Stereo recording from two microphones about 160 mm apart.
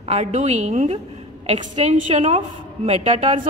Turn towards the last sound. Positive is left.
turn(degrees=-45)  # may be behind; listen again after turning